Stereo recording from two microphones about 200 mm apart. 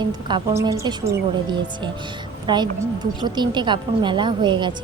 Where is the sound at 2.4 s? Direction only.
20° right (ahead or behind).